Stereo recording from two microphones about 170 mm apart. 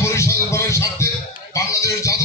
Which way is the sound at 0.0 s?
15° left (ahead or behind).